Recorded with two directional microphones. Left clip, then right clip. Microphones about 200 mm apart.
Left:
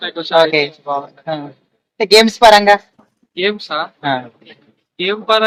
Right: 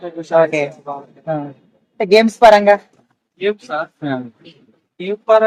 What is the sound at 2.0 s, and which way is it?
Speech, 50° right (ahead or behind).